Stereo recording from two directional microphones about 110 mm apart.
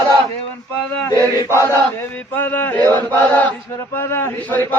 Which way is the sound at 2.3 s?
15° left (ahead or behind).